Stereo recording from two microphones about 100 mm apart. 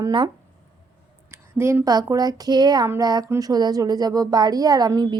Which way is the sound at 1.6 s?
25° right (ahead or behind).